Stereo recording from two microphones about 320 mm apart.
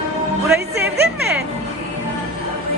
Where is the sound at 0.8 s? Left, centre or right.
Right.